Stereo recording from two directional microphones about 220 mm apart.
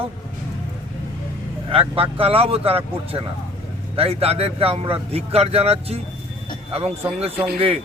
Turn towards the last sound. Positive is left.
turn(degrees=-25)  # may be behind; listen again after turning